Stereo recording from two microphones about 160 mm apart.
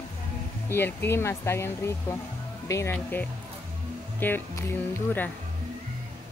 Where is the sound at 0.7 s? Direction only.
15° left (ahead or behind).